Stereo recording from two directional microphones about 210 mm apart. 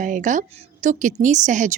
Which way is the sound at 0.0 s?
35° right (ahead or behind).